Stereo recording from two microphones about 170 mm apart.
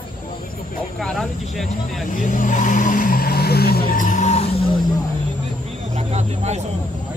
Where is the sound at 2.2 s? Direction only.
50° left (ahead or behind).